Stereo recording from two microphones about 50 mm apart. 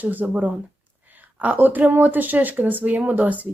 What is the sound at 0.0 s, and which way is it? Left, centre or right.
Speech, right.